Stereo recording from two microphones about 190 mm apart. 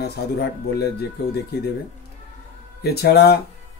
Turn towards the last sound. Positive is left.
turn(degrees=60)  # may be behind; listen again after turning